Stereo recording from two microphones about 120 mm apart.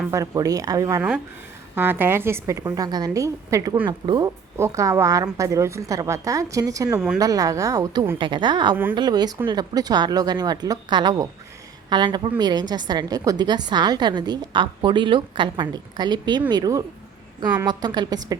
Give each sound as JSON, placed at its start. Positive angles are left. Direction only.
{"t": 0.1, "sound": "a woman's voice", "side_deg": -30}
{"t": 1.7, "sound": "a woman's voice", "side_deg": -15}
{"t": 4.5, "sound": "a woman's voice", "side_deg": -25}
{"t": 8.2, "sound": "a woman's voice", "side_deg": -40}
{"t": 8.7, "sound": "speech", "side_deg": -15}
{"t": 9.0, "sound": "a woman's voice", "side_deg": -35}